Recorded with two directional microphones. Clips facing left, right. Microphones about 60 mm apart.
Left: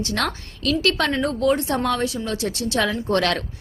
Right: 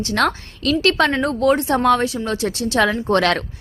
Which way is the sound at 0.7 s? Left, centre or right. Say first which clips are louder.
Right 4 dB; right.